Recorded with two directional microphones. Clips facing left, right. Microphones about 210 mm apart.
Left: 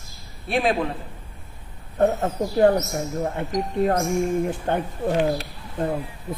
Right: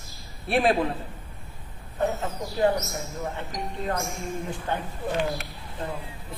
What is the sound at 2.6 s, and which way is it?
Speech, 55° left (ahead or behind).